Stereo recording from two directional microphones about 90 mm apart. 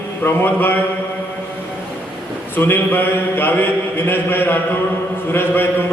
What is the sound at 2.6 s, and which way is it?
A man's voice, 25° left (ahead or behind).